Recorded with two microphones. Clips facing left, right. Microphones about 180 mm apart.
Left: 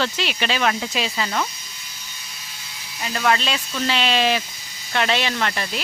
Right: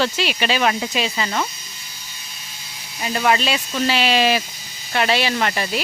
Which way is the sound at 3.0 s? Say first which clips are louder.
Right 2 dB; 10° right (ahead or behind).